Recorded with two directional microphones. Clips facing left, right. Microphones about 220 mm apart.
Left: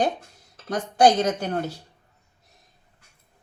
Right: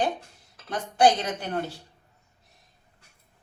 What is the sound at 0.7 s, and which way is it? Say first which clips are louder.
Speech: left 3 dB; 40° left (ahead or behind).